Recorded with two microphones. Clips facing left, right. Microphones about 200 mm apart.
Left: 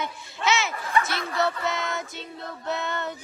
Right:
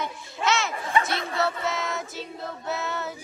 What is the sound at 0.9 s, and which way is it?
Speech, 25° right (ahead or behind).